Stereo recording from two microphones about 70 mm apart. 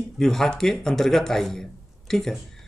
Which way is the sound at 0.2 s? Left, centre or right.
Centre.